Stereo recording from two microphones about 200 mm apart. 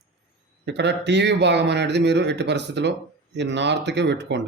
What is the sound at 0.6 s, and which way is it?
Speech, 60° right (ahead or behind).